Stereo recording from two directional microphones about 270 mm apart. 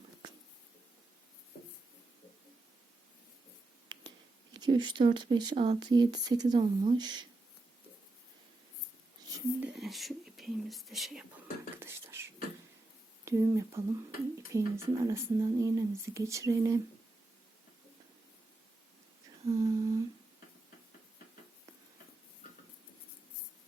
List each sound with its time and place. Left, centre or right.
4.5 s speech: centre
9.6 s speech: centre
11.8 s beatboxing: centre
13.2 s speech: centre
19.5 s humming: centre